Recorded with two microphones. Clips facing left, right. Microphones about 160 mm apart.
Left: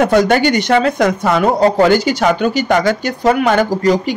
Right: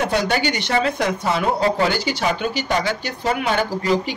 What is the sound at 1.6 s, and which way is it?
Speech, 45° left (ahead or behind).